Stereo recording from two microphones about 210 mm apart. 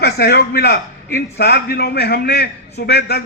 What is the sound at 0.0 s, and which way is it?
A man's voice, 50° left (ahead or behind).